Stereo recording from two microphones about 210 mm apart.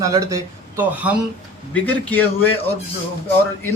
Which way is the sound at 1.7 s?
10° left (ahead or behind).